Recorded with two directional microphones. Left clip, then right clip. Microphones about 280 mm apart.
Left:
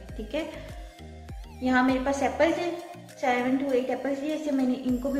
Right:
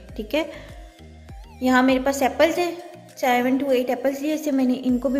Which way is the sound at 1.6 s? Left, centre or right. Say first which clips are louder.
Right 6 dB; right.